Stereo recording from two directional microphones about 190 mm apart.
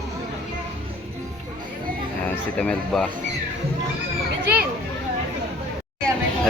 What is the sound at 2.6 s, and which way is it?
Speech, 5° left (ahead or behind).